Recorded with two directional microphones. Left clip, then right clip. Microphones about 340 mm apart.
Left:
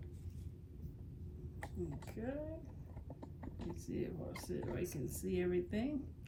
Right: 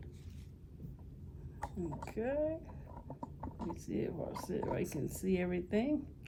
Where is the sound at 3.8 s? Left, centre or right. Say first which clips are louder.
Right 5 dB; right.